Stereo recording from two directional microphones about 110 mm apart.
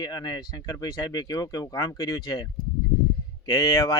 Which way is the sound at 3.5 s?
30° left (ahead or behind).